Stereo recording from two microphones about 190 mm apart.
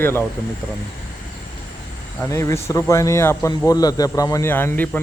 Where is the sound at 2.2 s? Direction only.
15° left (ahead or behind).